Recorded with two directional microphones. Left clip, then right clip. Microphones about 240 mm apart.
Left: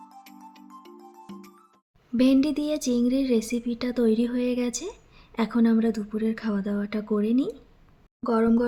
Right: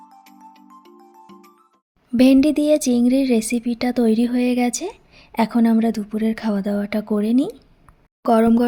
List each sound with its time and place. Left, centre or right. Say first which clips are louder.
0.3 s music: right 2 dB; centre
2.1 s speech: right 7 dB; right